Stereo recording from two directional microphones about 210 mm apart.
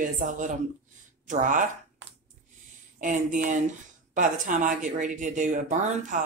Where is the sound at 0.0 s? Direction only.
40° right (ahead or behind).